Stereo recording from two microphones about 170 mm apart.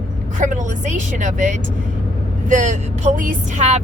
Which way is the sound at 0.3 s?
50° right (ahead or behind).